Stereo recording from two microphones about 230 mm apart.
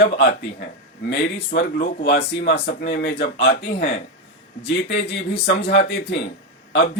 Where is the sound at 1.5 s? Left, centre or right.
Left.